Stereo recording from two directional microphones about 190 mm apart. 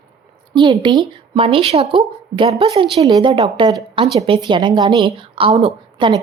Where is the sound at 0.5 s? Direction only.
25° right (ahead or behind).